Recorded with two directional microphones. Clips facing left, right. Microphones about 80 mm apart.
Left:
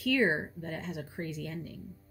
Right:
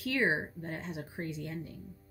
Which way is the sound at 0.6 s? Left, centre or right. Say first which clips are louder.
Left 1 dB; centre.